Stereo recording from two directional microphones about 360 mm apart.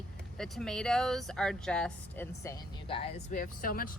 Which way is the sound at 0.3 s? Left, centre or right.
Centre.